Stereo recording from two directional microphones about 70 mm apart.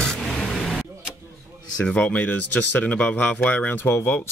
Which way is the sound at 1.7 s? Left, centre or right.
Centre.